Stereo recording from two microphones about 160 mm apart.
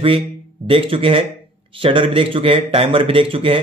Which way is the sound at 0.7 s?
35° right (ahead or behind).